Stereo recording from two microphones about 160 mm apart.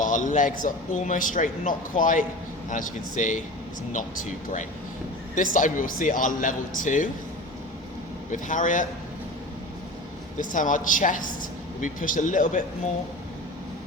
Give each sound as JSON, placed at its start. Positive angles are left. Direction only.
{"t": 0.0, "sound": "a man's voice", "side_deg": 55}
{"t": 8.3, "sound": "a man's voice", "side_deg": 55}
{"t": 10.3, "sound": "a woman's voice", "side_deg": 55}